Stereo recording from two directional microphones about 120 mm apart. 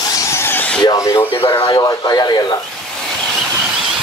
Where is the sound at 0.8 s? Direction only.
35° left (ahead or behind).